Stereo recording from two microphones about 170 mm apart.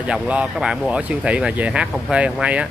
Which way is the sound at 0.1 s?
5° right (ahead or behind).